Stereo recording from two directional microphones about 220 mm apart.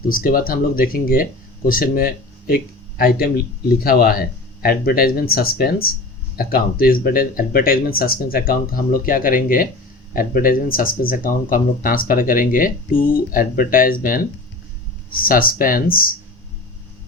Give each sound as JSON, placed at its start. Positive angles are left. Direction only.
{"t": 0.0, "sound": "speech", "side_deg": 40}
{"t": 15.3, "sound": "speech", "side_deg": 40}